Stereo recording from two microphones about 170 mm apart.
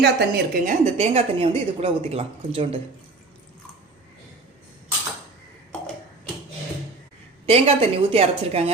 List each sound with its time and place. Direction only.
0.0 s a woman's voice: 75° right (ahead or behind)
0.6 s a woman's voice: 45° right (ahead or behind)
7.4 s a woman's voice: 35° right (ahead or behind)